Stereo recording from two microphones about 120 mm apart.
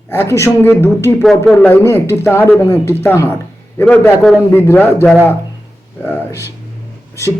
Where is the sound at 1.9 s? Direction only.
20° left (ahead or behind).